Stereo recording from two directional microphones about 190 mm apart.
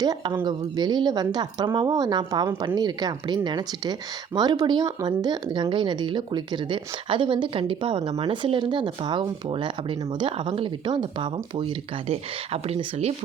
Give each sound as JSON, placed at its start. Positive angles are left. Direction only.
{"t": 0.0, "sound": "speech", "side_deg": -20}